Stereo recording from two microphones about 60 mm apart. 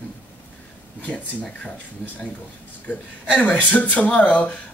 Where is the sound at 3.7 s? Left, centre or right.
Left.